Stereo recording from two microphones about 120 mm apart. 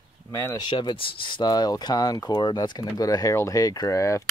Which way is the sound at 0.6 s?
40° left (ahead or behind).